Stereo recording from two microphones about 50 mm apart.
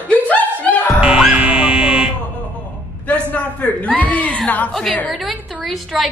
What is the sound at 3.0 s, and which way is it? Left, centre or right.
A man's voice, left.